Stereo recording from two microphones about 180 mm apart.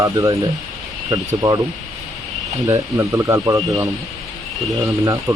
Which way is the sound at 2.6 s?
15° right (ahead or behind).